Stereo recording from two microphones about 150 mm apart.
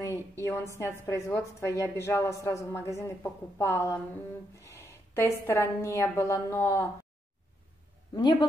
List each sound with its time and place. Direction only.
0.0 s a woman's voice: 20° left (ahead or behind)
8.1 s a woman's voice: 30° left (ahead or behind)